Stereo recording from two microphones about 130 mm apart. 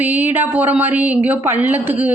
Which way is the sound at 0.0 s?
15° right (ahead or behind).